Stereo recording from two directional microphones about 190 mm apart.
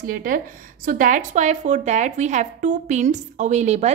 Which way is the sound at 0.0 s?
45° right (ahead or behind).